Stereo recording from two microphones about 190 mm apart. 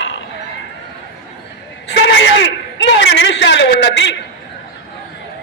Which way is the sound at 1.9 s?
65° left (ahead or behind).